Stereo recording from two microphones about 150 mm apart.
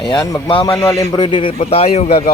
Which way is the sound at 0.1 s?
30° left (ahead or behind).